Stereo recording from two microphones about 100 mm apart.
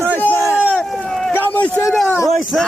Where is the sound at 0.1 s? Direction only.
15° left (ahead or behind).